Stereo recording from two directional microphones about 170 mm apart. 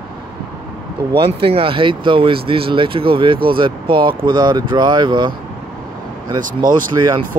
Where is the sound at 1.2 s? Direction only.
30° right (ahead or behind).